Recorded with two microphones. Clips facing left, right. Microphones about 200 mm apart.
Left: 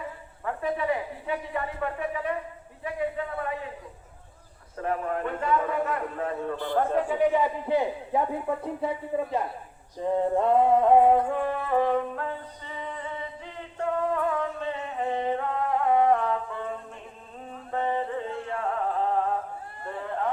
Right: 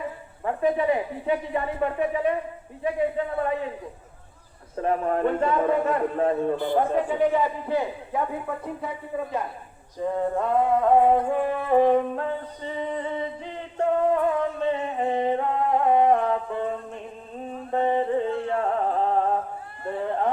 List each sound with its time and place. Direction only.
0.4 s speech: 20° right (ahead or behind)
4.8 s speech: 30° right (ahead or behind)
6.6 s a man's voice: 10° right (ahead or behind)
6.9 s a man's voice: 10° left (ahead or behind); by 10.9 s 25° left (ahead or behind)
11.3 s a man's voice: 10° right (ahead or behind)
11.7 s speech: 20° right (ahead or behind)
12.6 s music: 25° right (ahead or behind)
17.5 s a sound: 25° right (ahead or behind)
18.5 s music: 35° right (ahead or behind)
19.9 s a sound: 25° right (ahead or behind)